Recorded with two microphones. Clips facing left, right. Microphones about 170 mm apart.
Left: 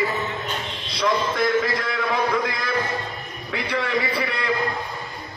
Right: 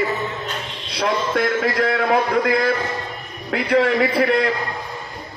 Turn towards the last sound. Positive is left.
turn(degrees=-55)  # may be behind; listen again after turning